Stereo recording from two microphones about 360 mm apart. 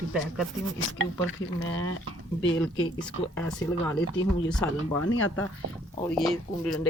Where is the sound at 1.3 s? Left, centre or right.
Left.